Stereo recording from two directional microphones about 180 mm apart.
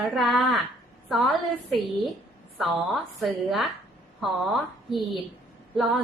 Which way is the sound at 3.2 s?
Centre (ahead or behind).